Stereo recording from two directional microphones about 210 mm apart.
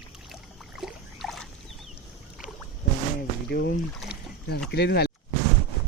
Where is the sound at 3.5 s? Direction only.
50° left (ahead or behind).